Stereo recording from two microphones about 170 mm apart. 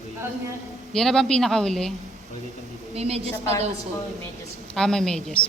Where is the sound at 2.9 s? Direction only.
35° right (ahead or behind).